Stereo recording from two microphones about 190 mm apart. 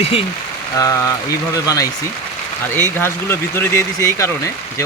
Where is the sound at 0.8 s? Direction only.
20° left (ahead or behind).